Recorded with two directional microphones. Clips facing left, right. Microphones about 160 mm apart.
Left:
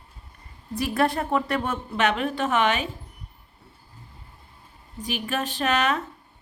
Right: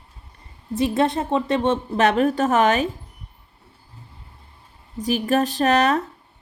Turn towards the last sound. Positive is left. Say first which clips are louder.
# right 6 dB
turn(degrees=-40)  # may be behind; listen again after turning